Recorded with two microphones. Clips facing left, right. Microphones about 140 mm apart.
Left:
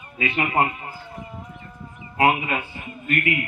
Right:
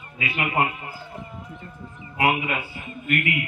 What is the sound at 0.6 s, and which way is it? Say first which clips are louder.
Speech: left 2 dB; 30° left (ahead or behind).